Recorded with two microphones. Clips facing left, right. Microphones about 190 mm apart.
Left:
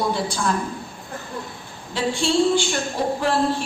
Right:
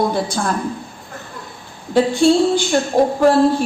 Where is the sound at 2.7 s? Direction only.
45° right (ahead or behind).